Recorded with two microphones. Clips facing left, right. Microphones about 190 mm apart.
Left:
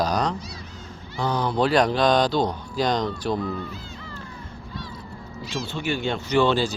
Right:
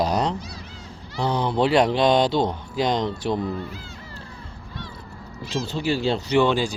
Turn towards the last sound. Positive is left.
turn(degrees=-15)  # may be behind; listen again after turning